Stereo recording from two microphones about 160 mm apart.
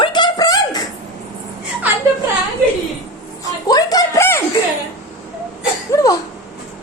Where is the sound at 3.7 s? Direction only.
25° left (ahead or behind).